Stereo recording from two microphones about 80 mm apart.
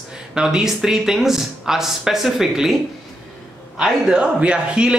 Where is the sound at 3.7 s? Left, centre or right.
Centre.